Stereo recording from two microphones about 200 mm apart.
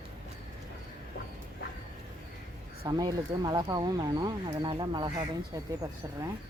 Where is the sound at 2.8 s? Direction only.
20° right (ahead or behind).